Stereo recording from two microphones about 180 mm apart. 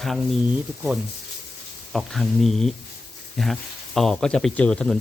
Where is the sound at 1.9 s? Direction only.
Centre (ahead or behind).